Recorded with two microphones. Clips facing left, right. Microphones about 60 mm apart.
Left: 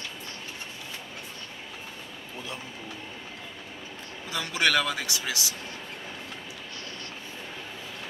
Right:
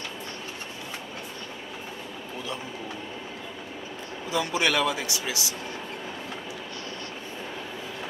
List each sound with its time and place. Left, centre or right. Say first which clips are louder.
4.3 s speech: right 1 dB; right